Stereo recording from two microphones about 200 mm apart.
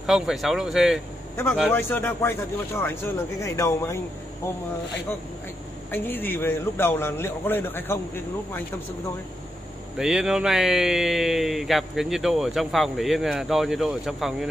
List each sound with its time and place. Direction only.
0.0 s speech: centre (ahead or behind)
1.7 s a man's voice: 10° left (ahead or behind)
5.9 s a man's voice: 10° left (ahead or behind)
9.9 s speech: 5° right (ahead or behind)